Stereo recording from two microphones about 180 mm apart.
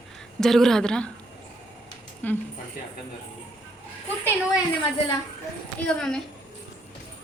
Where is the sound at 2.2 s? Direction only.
10° left (ahead or behind).